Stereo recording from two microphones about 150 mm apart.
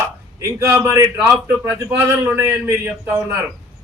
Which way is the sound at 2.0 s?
15° right (ahead or behind).